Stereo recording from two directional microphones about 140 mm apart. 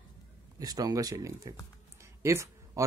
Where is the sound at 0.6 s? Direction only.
25° right (ahead or behind).